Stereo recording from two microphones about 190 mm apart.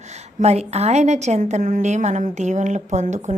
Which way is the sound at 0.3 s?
35° right (ahead or behind).